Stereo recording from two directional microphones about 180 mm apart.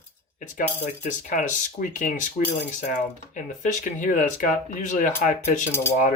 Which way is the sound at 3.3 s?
45° left (ahead or behind).